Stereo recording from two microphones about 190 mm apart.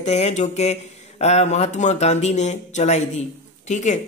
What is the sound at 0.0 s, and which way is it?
Speech, 35° left (ahead or behind).